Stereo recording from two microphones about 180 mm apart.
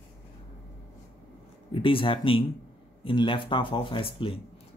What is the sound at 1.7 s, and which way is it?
Speech, 30° left (ahead or behind).